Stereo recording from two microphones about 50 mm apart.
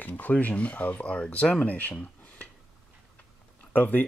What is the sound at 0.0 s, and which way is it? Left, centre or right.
Speech, left.